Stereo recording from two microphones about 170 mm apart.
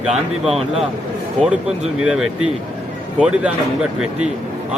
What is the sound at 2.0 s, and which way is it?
Speech, 5° right (ahead or behind).